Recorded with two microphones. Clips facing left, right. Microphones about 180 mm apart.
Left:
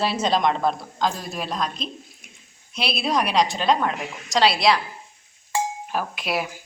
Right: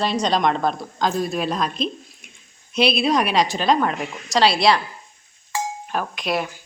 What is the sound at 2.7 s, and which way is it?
A woman's voice, centre (ahead or behind).